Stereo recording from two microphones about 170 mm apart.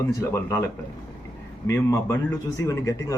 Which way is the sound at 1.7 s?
15° left (ahead or behind).